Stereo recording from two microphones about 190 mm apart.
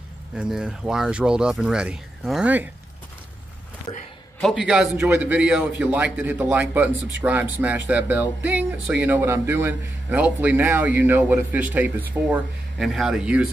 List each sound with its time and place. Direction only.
0.4 s speech: 5° right (ahead or behind)
3.9 s speech: 20° left (ahead or behind)
4.4 s speech: centre (ahead or behind)